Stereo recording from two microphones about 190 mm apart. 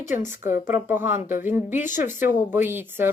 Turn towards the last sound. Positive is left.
turn(degrees=-10)  # may be behind; listen again after turning